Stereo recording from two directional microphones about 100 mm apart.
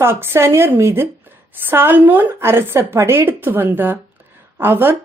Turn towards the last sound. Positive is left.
turn(degrees=-20)  # may be behind; listen again after turning